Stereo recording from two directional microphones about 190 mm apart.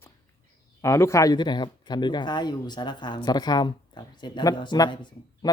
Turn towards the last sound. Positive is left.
turn(degrees=20)  # may be behind; listen again after turning